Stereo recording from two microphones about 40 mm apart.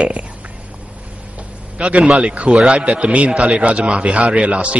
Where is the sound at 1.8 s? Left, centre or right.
Right.